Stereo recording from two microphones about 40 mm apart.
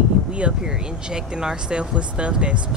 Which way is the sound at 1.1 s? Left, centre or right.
Centre.